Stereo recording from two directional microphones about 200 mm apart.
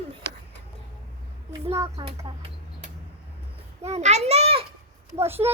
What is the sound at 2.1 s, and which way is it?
Speech, 25° right (ahead or behind).